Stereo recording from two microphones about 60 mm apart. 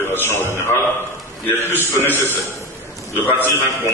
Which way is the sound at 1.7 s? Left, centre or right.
Left.